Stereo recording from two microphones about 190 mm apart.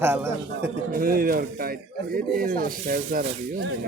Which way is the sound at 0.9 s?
50° right (ahead or behind).